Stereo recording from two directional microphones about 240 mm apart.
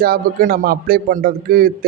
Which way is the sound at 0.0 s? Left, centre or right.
Right.